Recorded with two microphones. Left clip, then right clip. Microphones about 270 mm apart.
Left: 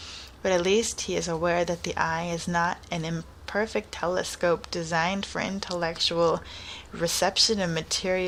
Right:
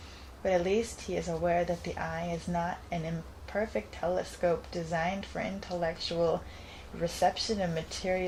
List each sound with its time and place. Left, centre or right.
0.4 s speech: left